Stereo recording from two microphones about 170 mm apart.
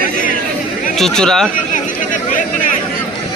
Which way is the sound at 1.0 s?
5° left (ahead or behind).